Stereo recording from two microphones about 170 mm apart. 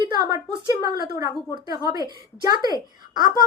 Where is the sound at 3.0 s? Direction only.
25° right (ahead or behind).